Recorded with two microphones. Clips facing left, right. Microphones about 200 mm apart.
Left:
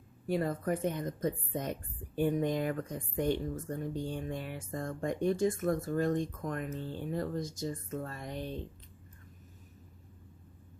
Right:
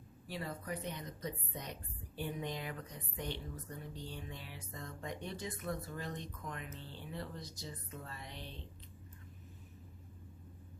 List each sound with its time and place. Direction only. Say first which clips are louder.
0.3 s a woman's voice: left 11 dB; 50° left (ahead or behind)